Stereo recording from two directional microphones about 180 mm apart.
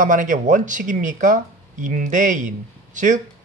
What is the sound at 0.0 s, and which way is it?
Speech, 45° right (ahead or behind).